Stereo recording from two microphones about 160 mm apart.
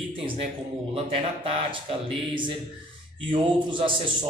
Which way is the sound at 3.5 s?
30° right (ahead or behind).